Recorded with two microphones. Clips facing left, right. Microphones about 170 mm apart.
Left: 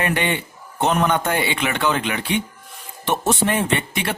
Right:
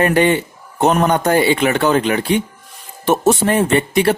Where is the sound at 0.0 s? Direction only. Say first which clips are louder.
Right 8 dB; 40° right (ahead or behind).